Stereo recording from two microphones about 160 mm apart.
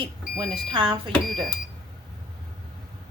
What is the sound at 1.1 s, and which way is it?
Speech, centre (ahead or behind).